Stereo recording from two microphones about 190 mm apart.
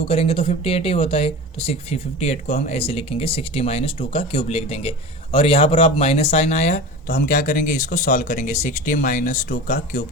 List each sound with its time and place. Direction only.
0.1 s speech: 30° left (ahead or behind)